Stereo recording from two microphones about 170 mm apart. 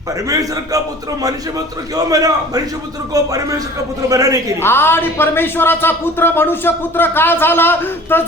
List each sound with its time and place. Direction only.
0.1 s a man's voice: 20° right (ahead or behind)
2.0 s a man's voice: 20° right (ahead or behind)
4.6 s speech: 15° left (ahead or behind)